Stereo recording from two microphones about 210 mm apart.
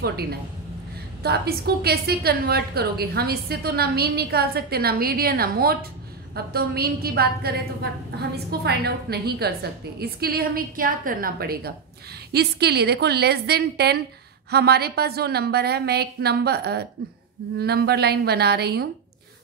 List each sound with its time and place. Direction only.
0.0 s a woman's voice: 50° right (ahead or behind)